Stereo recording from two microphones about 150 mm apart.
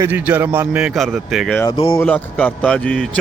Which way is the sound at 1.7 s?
35° left (ahead or behind).